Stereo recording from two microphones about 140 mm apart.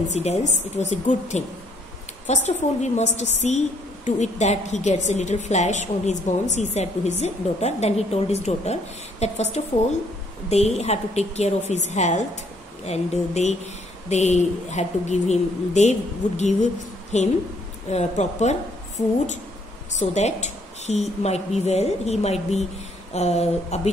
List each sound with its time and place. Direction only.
0.1 s a woman's voice: 55° left (ahead or behind)